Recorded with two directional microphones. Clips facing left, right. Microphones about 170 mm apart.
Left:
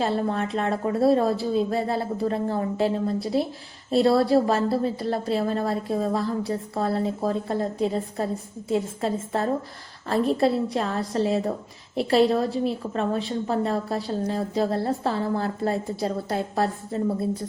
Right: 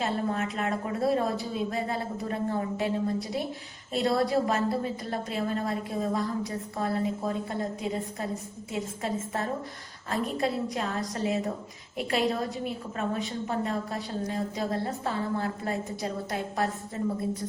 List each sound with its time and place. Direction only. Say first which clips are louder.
0.0 s a woman's voice: left 4 dB; 30° left (ahead or behind)